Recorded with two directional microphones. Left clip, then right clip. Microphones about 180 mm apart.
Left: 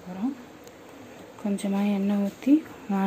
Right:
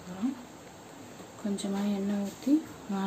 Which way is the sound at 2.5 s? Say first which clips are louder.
Left 5 dB; 20° left (ahead or behind).